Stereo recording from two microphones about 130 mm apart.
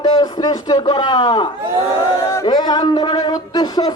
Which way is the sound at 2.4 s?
30° left (ahead or behind).